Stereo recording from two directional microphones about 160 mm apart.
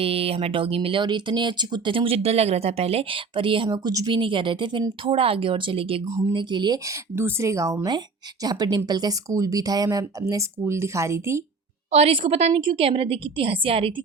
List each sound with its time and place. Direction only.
0.0 s speech: 35° right (ahead or behind)
7.2 s speech: 15° right (ahead or behind)
11.9 s speech: 40° right (ahead or behind)